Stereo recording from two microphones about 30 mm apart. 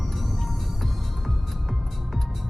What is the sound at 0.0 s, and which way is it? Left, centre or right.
Music, centre.